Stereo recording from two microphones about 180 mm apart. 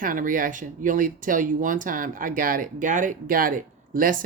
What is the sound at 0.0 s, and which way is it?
Speech, 50° right (ahead or behind).